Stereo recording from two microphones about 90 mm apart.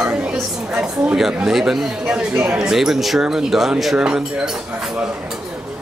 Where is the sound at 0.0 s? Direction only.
10° right (ahead or behind).